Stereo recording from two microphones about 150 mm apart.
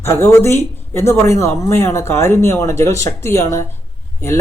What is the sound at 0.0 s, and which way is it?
Speech, 20° left (ahead or behind).